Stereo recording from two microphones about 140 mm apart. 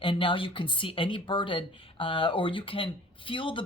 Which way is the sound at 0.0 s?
40° left (ahead or behind).